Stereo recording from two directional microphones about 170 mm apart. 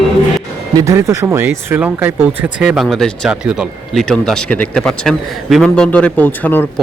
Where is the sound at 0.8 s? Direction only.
15° right (ahead or behind); by 6.7 s 10° left (ahead or behind).